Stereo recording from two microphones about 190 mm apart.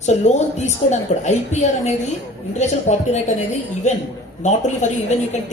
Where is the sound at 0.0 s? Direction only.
35° left (ahead or behind).